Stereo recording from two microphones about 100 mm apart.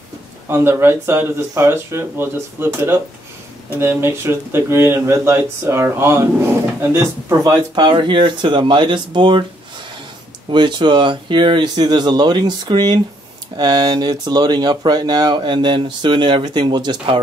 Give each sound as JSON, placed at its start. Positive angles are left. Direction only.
{"t": 0.5, "sound": "speech", "side_deg": -25}
{"t": 7.7, "sound": "speech", "side_deg": -50}
{"t": 10.5, "sound": "speech", "side_deg": -50}